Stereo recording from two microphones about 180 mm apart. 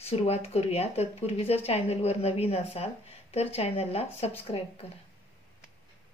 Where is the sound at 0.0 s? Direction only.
35° left (ahead or behind).